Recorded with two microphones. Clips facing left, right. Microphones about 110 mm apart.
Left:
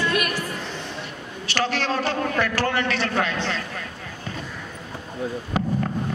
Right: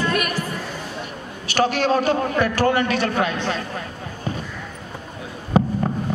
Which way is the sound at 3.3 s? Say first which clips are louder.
Right 3 dB; 40° right (ahead or behind).